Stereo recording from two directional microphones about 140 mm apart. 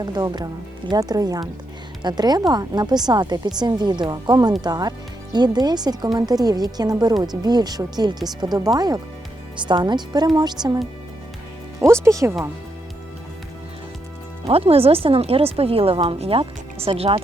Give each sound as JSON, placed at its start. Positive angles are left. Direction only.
{"t": 0.0, "sound": "a woman's voice", "side_deg": -30}
{"t": 11.9, "sound": "a woman's voice", "side_deg": -20}
{"t": 14.4, "sound": "speech", "side_deg": -45}